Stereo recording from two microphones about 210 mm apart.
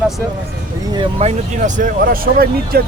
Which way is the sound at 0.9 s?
25° right (ahead or behind).